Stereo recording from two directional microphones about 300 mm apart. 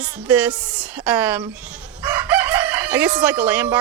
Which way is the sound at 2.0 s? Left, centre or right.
Centre.